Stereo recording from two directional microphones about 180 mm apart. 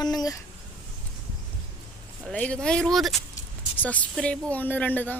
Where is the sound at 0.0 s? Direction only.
20° left (ahead or behind).